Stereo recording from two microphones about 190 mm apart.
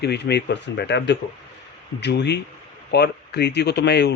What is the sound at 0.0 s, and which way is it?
Speech, 60° left (ahead or behind).